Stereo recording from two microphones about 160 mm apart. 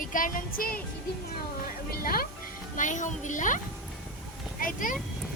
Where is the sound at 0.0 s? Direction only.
55° left (ahead or behind).